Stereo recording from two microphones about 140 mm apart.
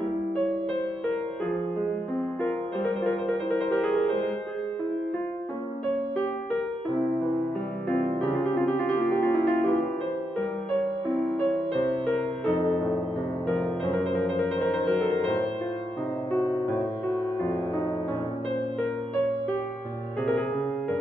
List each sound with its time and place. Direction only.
2.4 s music: 10° left (ahead or behind)
8.5 s music: 10° left (ahead or behind)
14.2 s music: 5° left (ahead or behind)
17.4 s music: 20° left (ahead or behind)